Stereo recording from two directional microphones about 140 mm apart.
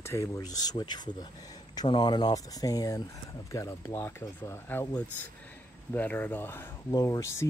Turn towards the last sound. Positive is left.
turn(degrees=20)  # may be behind; listen again after turning